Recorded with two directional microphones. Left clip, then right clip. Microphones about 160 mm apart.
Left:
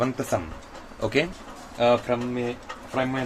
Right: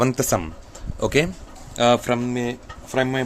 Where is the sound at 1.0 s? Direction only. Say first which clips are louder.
Right 4 dB; 75° right (ahead or behind).